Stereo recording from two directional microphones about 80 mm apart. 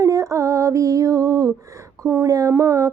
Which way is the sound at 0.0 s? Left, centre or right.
Right.